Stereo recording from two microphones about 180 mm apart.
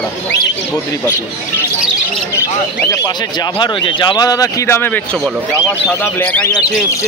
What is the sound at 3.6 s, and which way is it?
Speech, 25° left (ahead or behind).